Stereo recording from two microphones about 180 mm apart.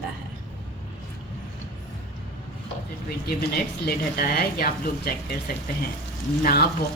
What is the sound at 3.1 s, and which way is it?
Speech, 60° left (ahead or behind).